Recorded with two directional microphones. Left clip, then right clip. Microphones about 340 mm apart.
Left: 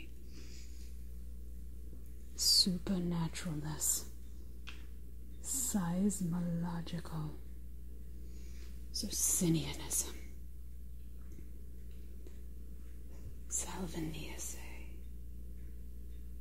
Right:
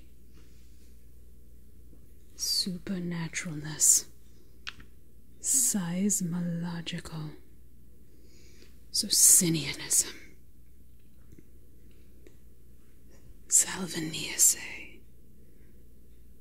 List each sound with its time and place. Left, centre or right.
2.3 s speech: centre
5.4 s speech: centre
6.4 s speech: right
8.9 s speech: centre
13.6 s speech: centre